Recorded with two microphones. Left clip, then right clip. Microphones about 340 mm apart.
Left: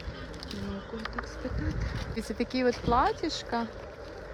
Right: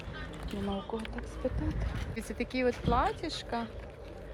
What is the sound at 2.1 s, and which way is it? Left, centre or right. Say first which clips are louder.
Speech: left 3 dB; centre.